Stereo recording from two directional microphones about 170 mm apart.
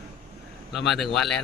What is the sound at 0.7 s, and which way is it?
Speech, centre (ahead or behind).